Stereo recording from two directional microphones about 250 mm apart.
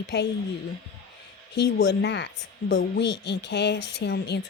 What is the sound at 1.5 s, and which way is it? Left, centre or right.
Speech, left.